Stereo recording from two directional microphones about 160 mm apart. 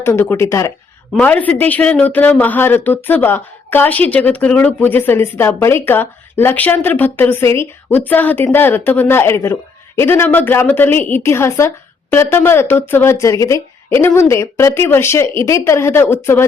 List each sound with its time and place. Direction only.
0.0 s speech: 15° left (ahead or behind)